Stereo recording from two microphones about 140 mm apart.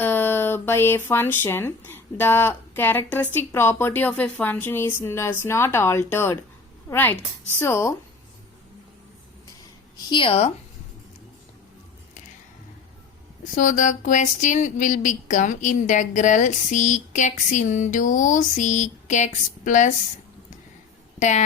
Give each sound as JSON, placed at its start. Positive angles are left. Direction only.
{"t": 0.0, "sound": "a woman's voice", "side_deg": 15}
{"t": 10.1, "sound": "speech", "side_deg": 40}
{"t": 13.6, "sound": "speech", "side_deg": 65}
{"t": 21.2, "sound": "speech", "side_deg": 55}